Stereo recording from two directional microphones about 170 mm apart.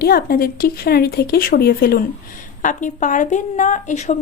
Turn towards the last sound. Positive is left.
turn(degrees=45)  # may be behind; listen again after turning